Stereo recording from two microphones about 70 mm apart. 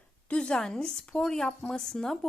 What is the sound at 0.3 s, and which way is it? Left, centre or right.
Speech, centre.